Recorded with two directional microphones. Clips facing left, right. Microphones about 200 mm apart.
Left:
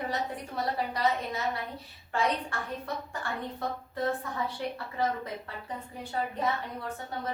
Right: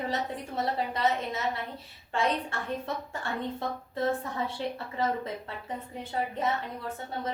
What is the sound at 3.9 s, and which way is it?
Speech, 25° right (ahead or behind).